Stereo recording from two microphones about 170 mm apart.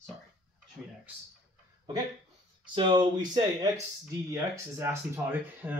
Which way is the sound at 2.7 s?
30° right (ahead or behind).